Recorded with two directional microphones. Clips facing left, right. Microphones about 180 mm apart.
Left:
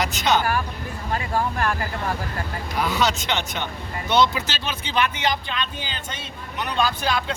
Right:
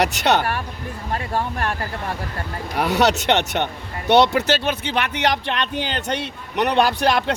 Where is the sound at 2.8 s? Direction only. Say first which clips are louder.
Right 5 dB; 65° right (ahead or behind).